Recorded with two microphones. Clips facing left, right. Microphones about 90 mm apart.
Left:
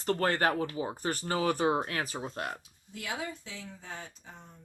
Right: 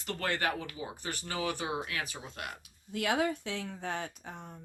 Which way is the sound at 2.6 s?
65° right (ahead or behind).